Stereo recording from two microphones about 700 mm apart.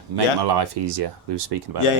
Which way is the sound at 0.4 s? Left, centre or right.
Right.